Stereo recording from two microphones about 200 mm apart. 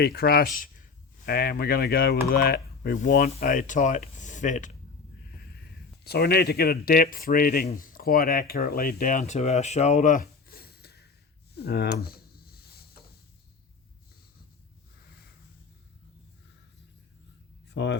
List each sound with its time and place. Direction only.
0.0 s speech: 50° left (ahead or behind)
6.1 s speech: 50° left (ahead or behind)
11.5 s a sound: 55° left (ahead or behind)
17.7 s speech: 60° left (ahead or behind)